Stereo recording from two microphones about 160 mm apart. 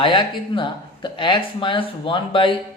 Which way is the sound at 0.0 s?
30° left (ahead or behind).